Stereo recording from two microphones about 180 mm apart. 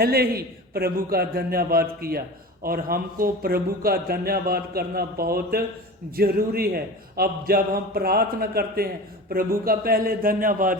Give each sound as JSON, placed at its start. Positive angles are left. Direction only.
{"t": 0.0, "sound": "a man's voice", "side_deg": -60}